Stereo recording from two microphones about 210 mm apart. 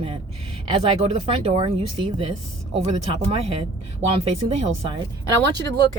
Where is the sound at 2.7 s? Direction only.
30° right (ahead or behind).